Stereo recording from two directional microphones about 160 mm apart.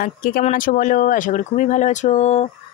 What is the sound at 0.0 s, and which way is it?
Speech, 65° left (ahead or behind).